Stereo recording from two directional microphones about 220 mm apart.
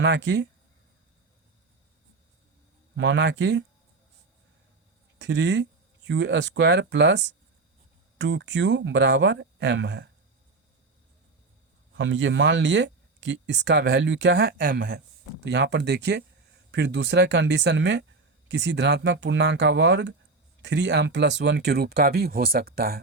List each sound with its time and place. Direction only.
0.0 s speech: 50° right (ahead or behind)
2.9 s speech: 55° right (ahead or behind)
5.2 s speech: 55° right (ahead or behind)
11.9 s speech: 60° right (ahead or behind)